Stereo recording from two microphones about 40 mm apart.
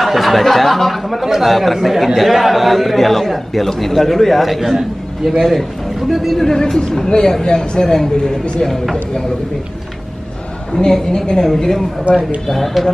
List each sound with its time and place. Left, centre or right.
0.0 s a man's voice: centre
6.4 s a woman's voice: centre
11.1 s a woman's voice: centre
12.0 s speech: right
12.4 s a man's voice: centre